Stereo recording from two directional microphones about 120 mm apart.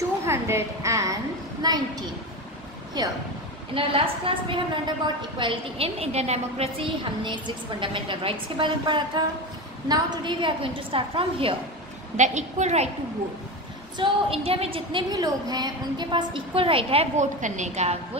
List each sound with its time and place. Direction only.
0.3 s a woman's voice: 20° right (ahead or behind)
3.0 s speech: 35° right (ahead or behind)
3.7 s a woman's voice: 50° right (ahead or behind); by 6.7 s 65° right (ahead or behind)
7.2 s a woman's voice: 40° right (ahead or behind)
12.2 s a woman's voice: 75° right (ahead or behind)
13.9 s a woman's voice: 45° right (ahead or behind)
17.2 s a woman's voice: 90° right